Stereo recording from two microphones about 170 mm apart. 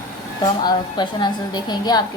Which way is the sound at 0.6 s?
25° left (ahead or behind).